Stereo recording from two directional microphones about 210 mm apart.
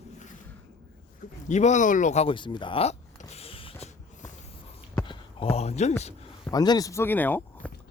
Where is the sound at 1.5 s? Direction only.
35° left (ahead or behind).